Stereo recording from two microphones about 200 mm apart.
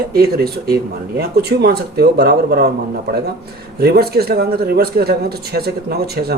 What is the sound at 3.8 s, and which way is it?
A man's voice, 50° right (ahead or behind).